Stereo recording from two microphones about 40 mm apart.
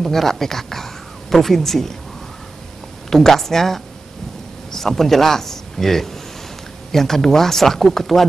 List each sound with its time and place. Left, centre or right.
0.0 s speech: centre
3.1 s a man's voice: centre